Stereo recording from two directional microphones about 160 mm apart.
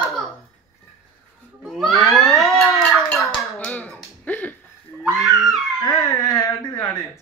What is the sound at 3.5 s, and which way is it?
Music, 10° left (ahead or behind).